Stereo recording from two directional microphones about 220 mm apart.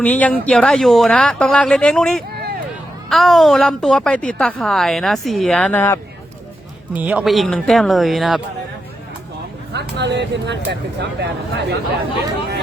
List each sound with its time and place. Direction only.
0.0 s a woman's voice: 5° left (ahead or behind)
6.9 s a woman's voice: 5° right (ahead or behind)
9.7 s speech: 50° right (ahead or behind)